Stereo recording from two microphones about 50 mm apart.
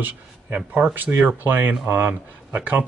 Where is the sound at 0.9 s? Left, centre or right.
Right.